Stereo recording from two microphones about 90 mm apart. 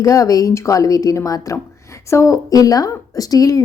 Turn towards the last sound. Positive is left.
turn(degrees=40)  # may be behind; listen again after turning